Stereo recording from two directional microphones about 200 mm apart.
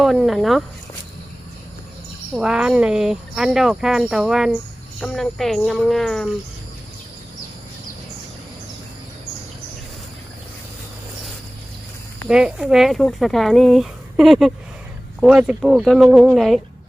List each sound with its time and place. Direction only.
0.0 s speech: centre (ahead or behind)
2.3 s speech: 5° right (ahead or behind)
12.3 s speech: 5° right (ahead or behind)